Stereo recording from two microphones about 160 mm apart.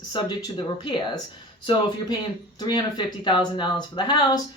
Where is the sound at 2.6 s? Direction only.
25° left (ahead or behind).